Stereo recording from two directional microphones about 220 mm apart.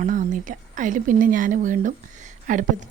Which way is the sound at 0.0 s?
35° right (ahead or behind).